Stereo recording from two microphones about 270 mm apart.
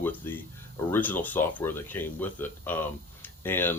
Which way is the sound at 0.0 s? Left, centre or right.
Centre.